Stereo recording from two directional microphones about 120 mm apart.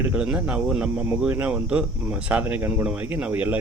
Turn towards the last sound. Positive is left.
turn(degrees=-15)  # may be behind; listen again after turning